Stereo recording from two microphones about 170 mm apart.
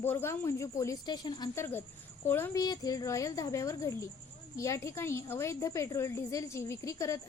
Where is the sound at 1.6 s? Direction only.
10° left (ahead or behind).